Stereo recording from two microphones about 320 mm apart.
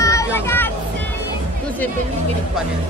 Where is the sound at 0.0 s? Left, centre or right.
Centre.